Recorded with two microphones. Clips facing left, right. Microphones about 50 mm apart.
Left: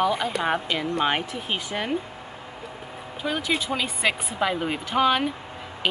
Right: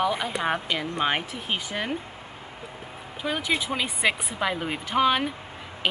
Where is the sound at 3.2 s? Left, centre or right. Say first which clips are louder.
Left 1 dB; centre.